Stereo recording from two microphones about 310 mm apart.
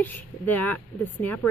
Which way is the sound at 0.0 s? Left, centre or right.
Centre.